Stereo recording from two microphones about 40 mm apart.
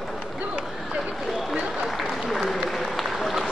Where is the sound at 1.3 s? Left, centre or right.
Centre.